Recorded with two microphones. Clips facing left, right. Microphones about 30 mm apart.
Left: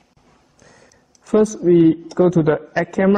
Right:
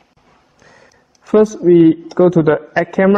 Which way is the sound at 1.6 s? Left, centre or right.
Centre.